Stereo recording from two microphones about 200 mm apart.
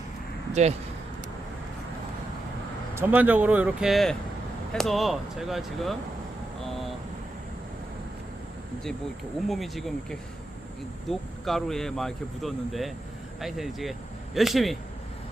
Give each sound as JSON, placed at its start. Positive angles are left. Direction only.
{"t": 0.5, "sound": "speech", "side_deg": -35}
{"t": 2.9, "sound": "speech", "side_deg": -10}
{"t": 6.7, "sound": "vehicle", "side_deg": 0}
{"t": 9.5, "sound": "speech", "side_deg": 0}